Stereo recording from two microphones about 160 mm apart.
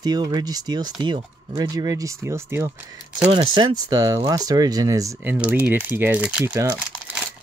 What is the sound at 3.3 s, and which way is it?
Speech, 30° right (ahead or behind).